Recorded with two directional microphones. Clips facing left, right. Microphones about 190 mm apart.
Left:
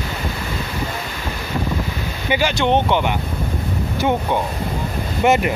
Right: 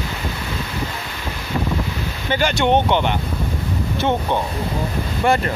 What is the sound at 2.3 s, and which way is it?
Speech, 5° left (ahead or behind).